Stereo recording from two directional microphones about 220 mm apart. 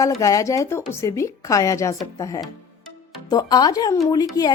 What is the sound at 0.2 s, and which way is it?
Speech, 15° left (ahead or behind).